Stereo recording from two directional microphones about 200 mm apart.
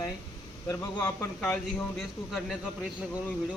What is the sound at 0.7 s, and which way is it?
Speech, 10° left (ahead or behind).